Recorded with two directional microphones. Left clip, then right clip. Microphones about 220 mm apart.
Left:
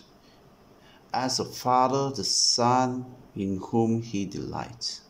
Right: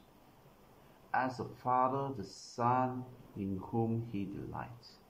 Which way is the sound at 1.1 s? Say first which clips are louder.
Left 7 dB; 20° left (ahead or behind).